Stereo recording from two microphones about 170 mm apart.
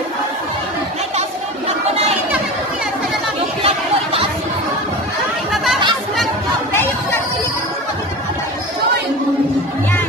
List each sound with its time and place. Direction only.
3.6 s chatter: 35° right (ahead or behind)